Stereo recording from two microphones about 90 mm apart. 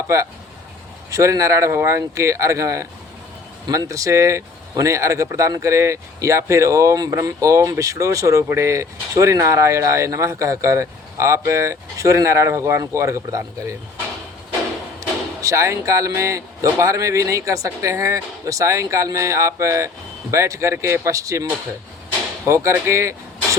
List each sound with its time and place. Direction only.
1.1 s speech: 35° right (ahead or behind)
15.4 s speech: 35° right (ahead or behind)
22.4 s speech: 35° right (ahead or behind)